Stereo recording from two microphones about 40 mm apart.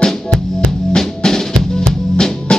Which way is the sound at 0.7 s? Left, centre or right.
Centre.